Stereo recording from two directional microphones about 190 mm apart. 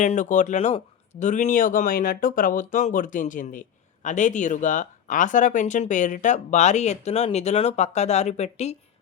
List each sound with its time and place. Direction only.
0.0 s speech: 40° left (ahead or behind)